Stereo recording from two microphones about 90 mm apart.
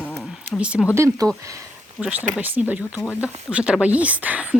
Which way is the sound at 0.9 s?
35° right (ahead or behind).